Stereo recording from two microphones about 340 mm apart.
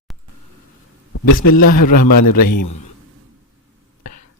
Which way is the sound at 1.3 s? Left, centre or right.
Left.